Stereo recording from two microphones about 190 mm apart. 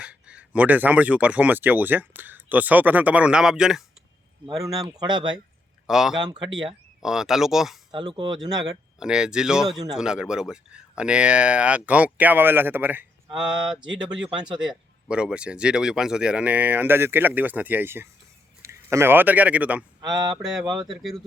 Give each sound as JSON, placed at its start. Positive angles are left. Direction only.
{"t": 0.0, "sound": "speech", "side_deg": -5}
{"t": 4.9, "sound": "speech", "side_deg": -20}
{"t": 5.9, "sound": "mantra", "side_deg": 0}
{"t": 6.1, "sound": "speech", "side_deg": -25}
{"t": 7.0, "sound": "mantra", "side_deg": -5}
{"t": 7.9, "sound": "speech", "side_deg": -25}
{"t": 9.0, "sound": "mantra", "side_deg": -5}
{"t": 9.9, "sound": "speech", "side_deg": -5}
{"t": 13.3, "sound": "mantra", "side_deg": -5}
{"t": 14.6, "sound": "a man's voice", "side_deg": -5}
{"t": 20.0, "sound": "a sound", "side_deg": -20}
{"t": 20.3, "sound": "mantra", "side_deg": 0}